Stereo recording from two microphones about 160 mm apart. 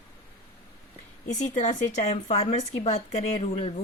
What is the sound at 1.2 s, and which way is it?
A woman's voice, 50° left (ahead or behind).